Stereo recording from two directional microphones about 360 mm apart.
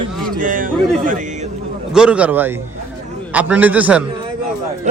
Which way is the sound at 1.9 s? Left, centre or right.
Centre.